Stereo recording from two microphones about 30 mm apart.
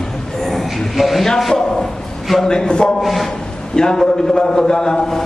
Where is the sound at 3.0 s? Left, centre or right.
Centre.